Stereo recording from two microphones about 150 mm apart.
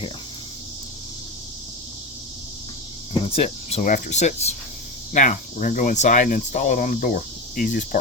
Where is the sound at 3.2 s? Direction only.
40° left (ahead or behind); by 8.0 s 65° left (ahead or behind).